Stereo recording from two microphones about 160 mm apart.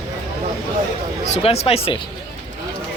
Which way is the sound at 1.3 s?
40° left (ahead or behind).